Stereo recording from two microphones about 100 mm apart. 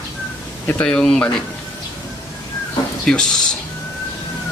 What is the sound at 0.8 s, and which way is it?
Speech, 5° left (ahead or behind).